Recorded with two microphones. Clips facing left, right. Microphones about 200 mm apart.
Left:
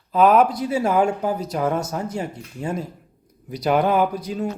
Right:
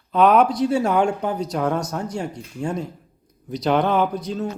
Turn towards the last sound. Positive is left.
turn(degrees=10)  # may be behind; listen again after turning